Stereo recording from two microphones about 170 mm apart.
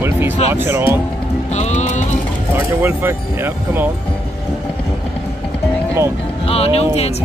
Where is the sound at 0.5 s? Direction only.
15° right (ahead or behind).